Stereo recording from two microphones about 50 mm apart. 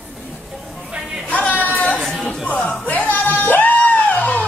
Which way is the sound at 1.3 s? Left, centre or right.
Left.